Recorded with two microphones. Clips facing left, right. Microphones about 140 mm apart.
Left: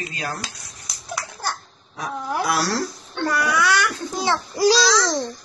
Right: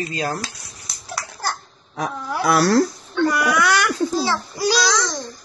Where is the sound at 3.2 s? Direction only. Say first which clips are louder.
Right 2 dB; 10° right (ahead or behind).